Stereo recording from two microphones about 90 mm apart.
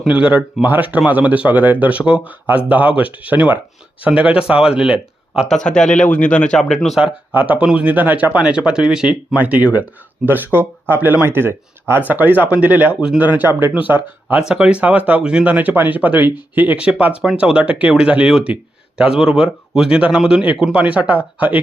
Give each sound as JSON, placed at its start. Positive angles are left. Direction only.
{"t": 0.1, "sound": "speech", "side_deg": -15}
{"t": 5.5, "sound": "speech", "side_deg": 10}
{"t": 7.0, "sound": "speech", "side_deg": -20}
{"t": 9.4, "sound": "speech", "side_deg": -15}